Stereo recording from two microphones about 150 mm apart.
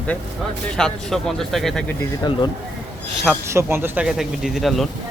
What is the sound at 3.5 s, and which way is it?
Speech, 15° right (ahead or behind).